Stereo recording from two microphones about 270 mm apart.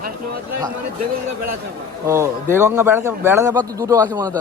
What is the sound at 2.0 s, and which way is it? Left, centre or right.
Speech, centre.